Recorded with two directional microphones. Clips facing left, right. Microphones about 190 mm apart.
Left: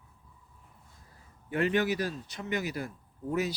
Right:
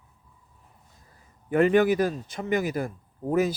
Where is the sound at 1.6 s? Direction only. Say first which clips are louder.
Right 7 dB; 50° right (ahead or behind).